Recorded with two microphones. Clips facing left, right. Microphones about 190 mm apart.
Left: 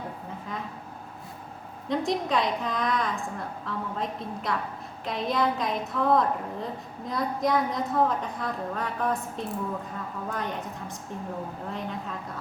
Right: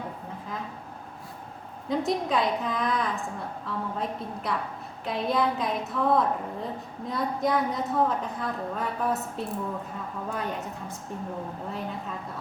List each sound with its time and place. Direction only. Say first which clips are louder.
1.9 s a woman's voice: even; centre (ahead or behind)